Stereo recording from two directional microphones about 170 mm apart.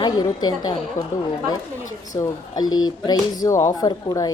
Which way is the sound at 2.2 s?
25° left (ahead or behind).